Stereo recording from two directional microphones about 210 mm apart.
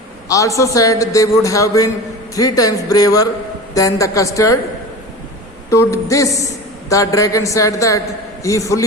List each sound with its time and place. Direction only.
0.3 s a man's voice: 15° left (ahead or behind)
5.7 s a man's voice: 15° left (ahead or behind)